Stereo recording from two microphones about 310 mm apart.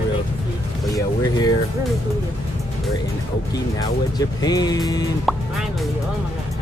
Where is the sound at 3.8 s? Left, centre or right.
Centre.